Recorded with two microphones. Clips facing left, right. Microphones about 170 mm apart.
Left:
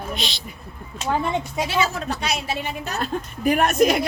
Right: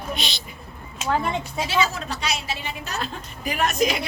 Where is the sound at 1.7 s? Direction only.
55° left (ahead or behind).